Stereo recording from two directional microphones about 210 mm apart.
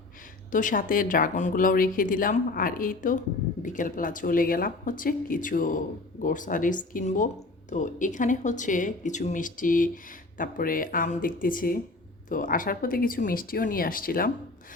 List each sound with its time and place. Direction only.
0.5 s speech: 40° left (ahead or behind)